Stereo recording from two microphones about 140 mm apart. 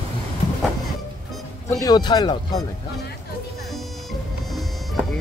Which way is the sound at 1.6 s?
25° left (ahead or behind).